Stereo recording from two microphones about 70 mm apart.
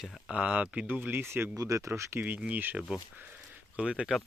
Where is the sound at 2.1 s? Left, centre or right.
Right.